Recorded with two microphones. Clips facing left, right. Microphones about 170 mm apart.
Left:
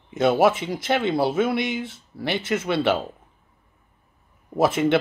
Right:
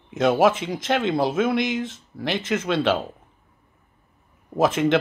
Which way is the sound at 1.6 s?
90° right.